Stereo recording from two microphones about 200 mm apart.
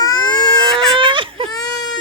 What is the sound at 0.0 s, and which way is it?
Baby cry, 20° left (ahead or behind).